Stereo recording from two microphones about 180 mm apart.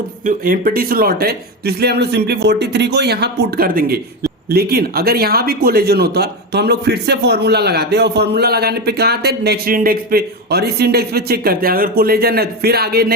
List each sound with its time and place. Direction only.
0.3 s a man's voice: 50° right (ahead or behind)